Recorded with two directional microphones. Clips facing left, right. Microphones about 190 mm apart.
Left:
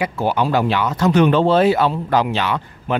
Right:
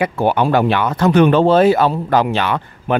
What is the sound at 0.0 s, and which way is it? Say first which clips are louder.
Speech: right 4 dB; 55° right (ahead or behind).